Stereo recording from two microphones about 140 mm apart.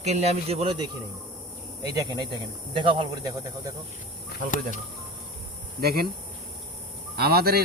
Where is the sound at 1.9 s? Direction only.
30° right (ahead or behind).